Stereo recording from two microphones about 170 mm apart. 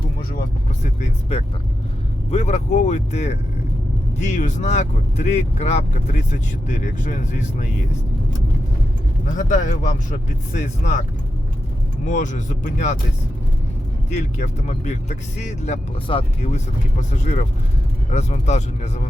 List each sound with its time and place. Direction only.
2.3 s speech: 40° left (ahead or behind)
9.3 s speech: 50° left (ahead or behind)
12.0 s speech: 45° left (ahead or behind)
14.1 s speech: 45° left (ahead or behind)
16.0 s speech: 30° left (ahead or behind)
17.0 s speech: 45° left (ahead or behind)